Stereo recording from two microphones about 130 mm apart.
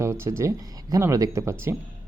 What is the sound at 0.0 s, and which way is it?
Speech, 20° right (ahead or behind).